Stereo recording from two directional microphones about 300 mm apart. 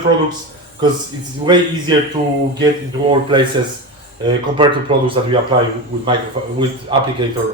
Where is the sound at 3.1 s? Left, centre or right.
Centre.